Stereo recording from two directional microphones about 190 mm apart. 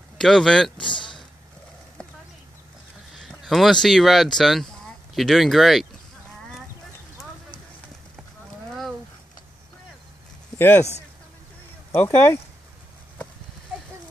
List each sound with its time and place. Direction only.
0.2 s speech: centre (ahead or behind)
0.8 s a sound: 25° left (ahead or behind)
3.2 s a sound: centre (ahead or behind)
3.8 s speech: centre (ahead or behind)
10.6 s speech: 10° left (ahead or behind)
11.9 s speech: 10° left (ahead or behind)